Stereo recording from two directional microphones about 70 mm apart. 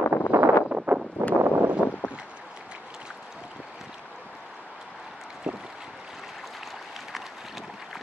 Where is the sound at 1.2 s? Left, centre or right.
Right.